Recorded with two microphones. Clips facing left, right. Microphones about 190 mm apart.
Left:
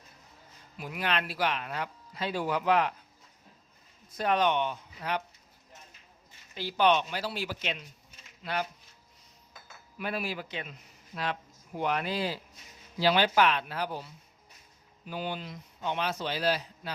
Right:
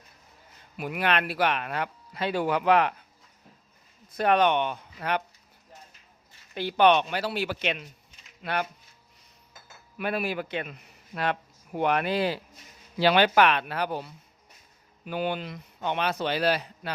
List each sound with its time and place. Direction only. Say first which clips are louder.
0.8 s speech: right 5 dB; 65° right (ahead or behind)
4.1 s speech: right 4 dB; 65° right (ahead or behind)
6.5 s speech: right 5 dB; 60° right (ahead or behind)
10.0 s a man's voice: right 5 dB; 60° right (ahead or behind)